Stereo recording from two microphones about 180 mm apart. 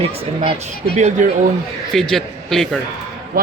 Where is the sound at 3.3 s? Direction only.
55° right (ahead or behind).